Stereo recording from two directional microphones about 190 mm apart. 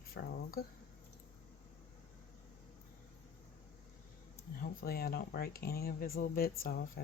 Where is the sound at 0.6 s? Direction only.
55° left (ahead or behind).